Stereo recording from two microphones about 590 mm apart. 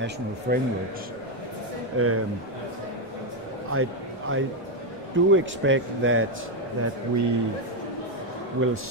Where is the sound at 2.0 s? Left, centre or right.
Right.